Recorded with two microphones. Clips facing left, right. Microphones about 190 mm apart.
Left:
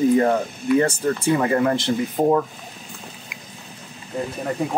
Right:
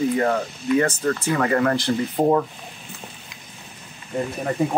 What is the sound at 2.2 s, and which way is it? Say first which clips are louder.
Speech: even; centre (ahead or behind).